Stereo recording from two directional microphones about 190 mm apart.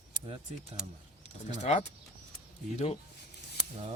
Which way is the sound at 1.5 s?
35° left (ahead or behind).